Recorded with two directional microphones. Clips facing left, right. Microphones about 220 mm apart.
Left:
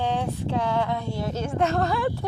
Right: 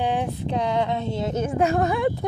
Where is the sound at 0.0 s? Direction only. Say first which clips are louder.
Right 2 dB; 15° right (ahead or behind).